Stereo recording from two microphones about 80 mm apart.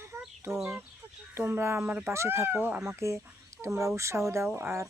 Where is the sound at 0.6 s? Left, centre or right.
Right.